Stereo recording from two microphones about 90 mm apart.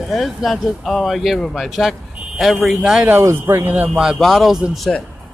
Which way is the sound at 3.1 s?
30° right (ahead or behind).